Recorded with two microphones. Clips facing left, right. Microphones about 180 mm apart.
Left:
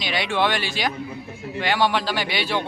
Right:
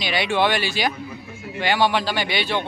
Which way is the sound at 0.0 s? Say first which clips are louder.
Right 2 dB; 5° right (ahead or behind).